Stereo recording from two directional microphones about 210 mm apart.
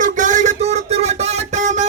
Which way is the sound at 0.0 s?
35° right (ahead or behind).